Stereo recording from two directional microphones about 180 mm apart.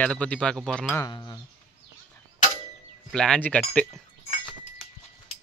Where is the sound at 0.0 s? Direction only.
5° left (ahead or behind).